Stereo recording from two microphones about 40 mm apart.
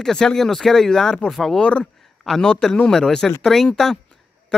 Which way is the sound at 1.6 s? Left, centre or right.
Left.